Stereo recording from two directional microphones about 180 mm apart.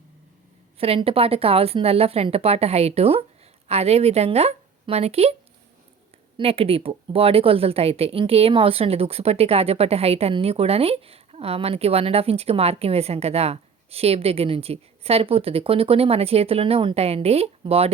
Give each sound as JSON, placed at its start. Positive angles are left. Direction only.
{"t": 0.8, "sound": "a woman's voice", "side_deg": -30}